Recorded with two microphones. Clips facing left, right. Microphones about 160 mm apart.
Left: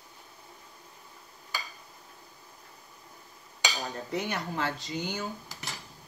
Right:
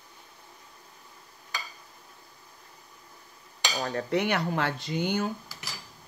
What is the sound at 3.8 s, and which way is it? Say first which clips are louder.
Speech: right 9 dB; 70° right (ahead or behind).